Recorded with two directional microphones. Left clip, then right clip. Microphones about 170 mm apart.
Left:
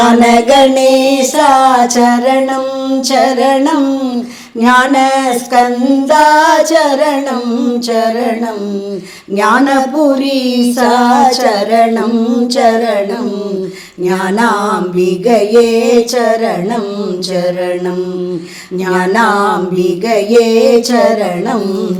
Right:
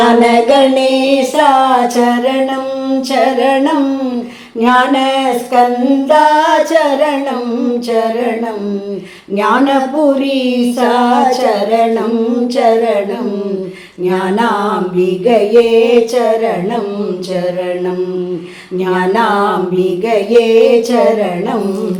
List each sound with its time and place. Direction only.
0.0 s music: 45° left (ahead or behind)
9.4 s music: 45° left (ahead or behind)
14.0 s music: 45° left (ahead or behind)
18.9 s music: 45° left (ahead or behind)